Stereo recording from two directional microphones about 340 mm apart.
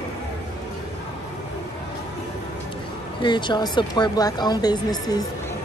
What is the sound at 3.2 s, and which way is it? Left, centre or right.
Speech, centre.